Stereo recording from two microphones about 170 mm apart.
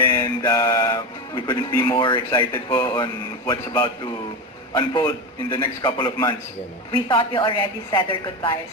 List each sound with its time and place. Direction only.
0.0 s music: 15° left (ahead or behind)
2.6 s a man's voice: 25° left (ahead or behind)